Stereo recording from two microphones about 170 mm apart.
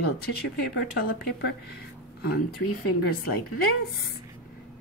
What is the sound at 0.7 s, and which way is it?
Speech, 75° left (ahead or behind).